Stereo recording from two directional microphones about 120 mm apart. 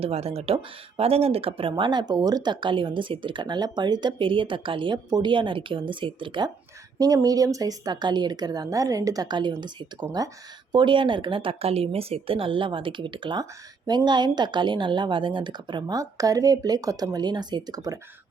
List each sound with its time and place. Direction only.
0.0 s speech: 55° right (ahead or behind)
7.0 s speech: 30° right (ahead or behind)